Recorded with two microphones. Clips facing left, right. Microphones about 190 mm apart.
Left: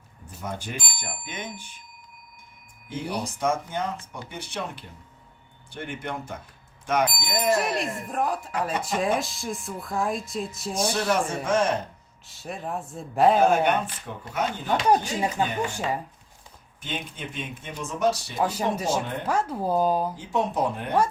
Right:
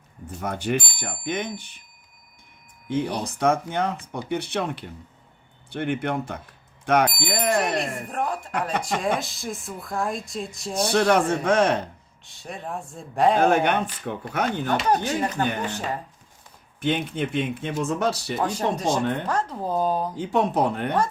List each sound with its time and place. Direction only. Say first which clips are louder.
0.4 s speech: right 8 dB; 60° right (ahead or behind)
2.9 s speech: right 5 dB; 60° right (ahead or behind)
7.7 s speech: right 2 dB; centre (ahead or behind)
10.9 s speech: right 9 dB; 65° right (ahead or behind)
12.2 s speech: left 1 dB; centre (ahead or behind)
13.4 s speech: right 1 dB; 65° right (ahead or behind)
14.8 s speech: left 3 dB; 10° left (ahead or behind)
16.8 s speech: right 10 dB; 60° right (ahead or behind)
18.3 s speech: right 1 dB; 5° left (ahead or behind)
20.1 s speech: right 4 dB; 65° right (ahead or behind)